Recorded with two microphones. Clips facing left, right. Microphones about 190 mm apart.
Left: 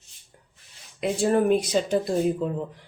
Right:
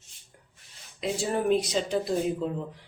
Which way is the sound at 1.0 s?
50° left (ahead or behind).